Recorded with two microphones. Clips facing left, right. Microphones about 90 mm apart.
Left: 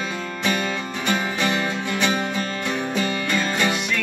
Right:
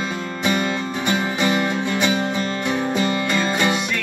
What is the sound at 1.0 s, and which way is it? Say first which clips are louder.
Music: right 2 dB; 20° right (ahead or behind).